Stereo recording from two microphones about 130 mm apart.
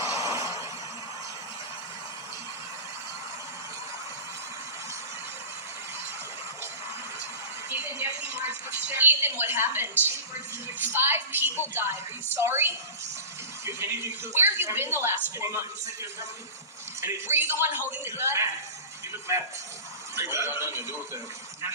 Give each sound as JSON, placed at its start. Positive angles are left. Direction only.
{"t": 0.0, "sound": "a sound", "side_deg": -25}
{"t": 7.7, "sound": "a man's voice", "side_deg": -15}
{"t": 17.0, "sound": "a man's voice", "side_deg": -20}
{"t": 20.1, "sound": "a woman's voice", "side_deg": -20}